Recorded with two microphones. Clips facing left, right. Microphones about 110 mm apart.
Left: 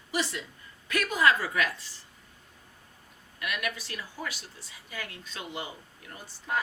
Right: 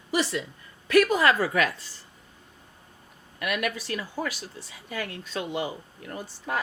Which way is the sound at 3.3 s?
55° right (ahead or behind).